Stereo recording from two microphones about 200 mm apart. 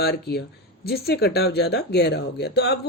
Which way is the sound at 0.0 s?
55° left (ahead or behind).